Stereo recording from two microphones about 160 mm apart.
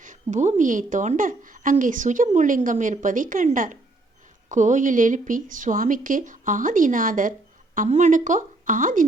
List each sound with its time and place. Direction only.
0.0 s a woman's voice: 50° right (ahead or behind)
7.8 s speech: 50° right (ahead or behind)